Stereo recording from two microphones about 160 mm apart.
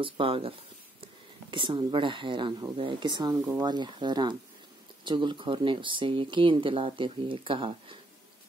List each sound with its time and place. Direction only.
0.0 s speech: 35° right (ahead or behind)